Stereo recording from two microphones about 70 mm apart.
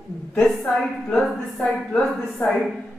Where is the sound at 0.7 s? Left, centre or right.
Centre.